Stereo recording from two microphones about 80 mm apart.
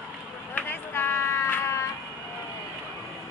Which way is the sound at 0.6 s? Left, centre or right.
Left.